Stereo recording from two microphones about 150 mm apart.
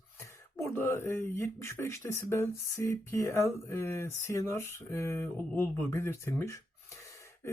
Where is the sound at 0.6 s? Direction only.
15° left (ahead or behind).